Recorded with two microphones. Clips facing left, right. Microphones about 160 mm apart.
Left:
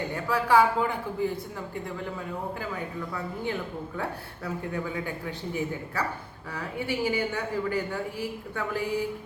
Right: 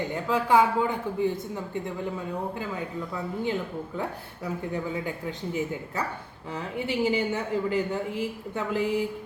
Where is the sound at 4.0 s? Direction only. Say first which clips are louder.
Left 1 dB; 20° right (ahead or behind).